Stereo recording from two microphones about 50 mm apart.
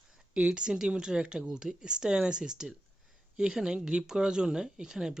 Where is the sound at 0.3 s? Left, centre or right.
Centre.